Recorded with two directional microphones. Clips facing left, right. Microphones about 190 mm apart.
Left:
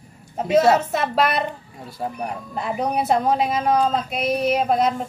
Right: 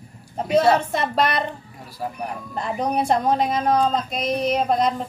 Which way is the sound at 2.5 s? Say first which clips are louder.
Even; 5° left (ahead or behind).